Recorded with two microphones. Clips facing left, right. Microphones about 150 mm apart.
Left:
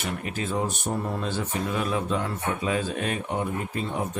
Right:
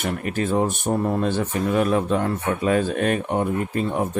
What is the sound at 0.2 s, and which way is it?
Speech, 55° right (ahead or behind).